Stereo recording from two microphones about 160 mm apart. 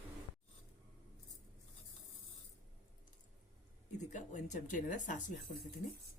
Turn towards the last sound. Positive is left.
turn(degrees=55)  # may be behind; listen again after turning